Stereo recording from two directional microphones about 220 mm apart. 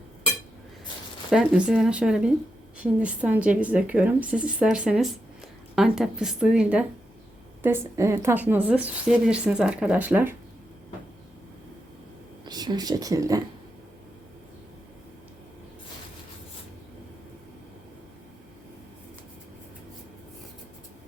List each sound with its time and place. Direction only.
1.3 s a woman's voice: 5° right (ahead or behind)
12.5 s speech: 20° right (ahead or behind)